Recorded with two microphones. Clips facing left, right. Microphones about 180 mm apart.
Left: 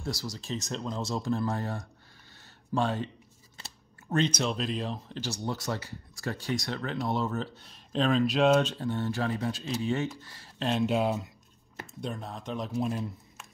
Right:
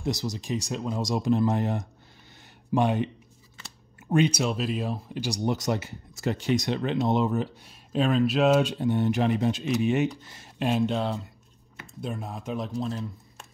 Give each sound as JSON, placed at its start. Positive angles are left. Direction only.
{"t": 0.0, "sound": "speech", "side_deg": -20}
{"t": 4.1, "sound": "speech", "side_deg": -10}
{"t": 10.7, "sound": "speech", "side_deg": 0}